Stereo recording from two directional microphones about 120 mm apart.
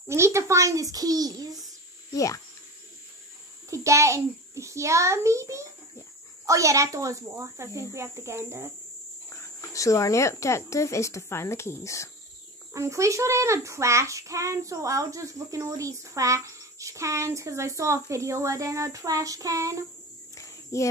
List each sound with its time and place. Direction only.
0.1 s a child's voice: 25° right (ahead or behind)
2.1 s speech: 25° left (ahead or behind)
3.7 s a child's voice: 25° right (ahead or behind)
9.3 s speech: 25° left (ahead or behind)
12.7 s a child's voice: 25° right (ahead or behind)
20.3 s a sound: 25° left (ahead or behind)